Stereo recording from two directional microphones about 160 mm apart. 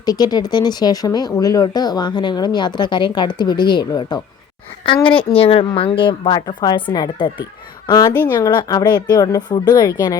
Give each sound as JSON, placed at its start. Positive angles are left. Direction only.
{"t": 0.0, "sound": "a woman's voice", "side_deg": 25}